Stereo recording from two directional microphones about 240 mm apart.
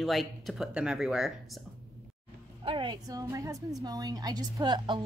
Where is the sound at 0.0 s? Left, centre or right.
Centre.